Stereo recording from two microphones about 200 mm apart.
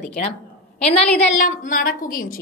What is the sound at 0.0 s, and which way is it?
Speech, 40° left (ahead or behind).